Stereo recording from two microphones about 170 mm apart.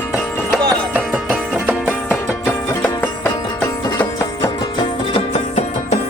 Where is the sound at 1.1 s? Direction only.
5° right (ahead or behind).